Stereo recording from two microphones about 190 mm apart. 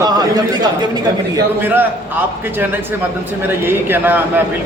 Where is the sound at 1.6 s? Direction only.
10° right (ahead or behind).